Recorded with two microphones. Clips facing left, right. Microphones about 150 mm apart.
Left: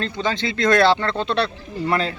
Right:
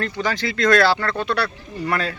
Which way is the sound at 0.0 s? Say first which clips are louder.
Even; 25° left (ahead or behind).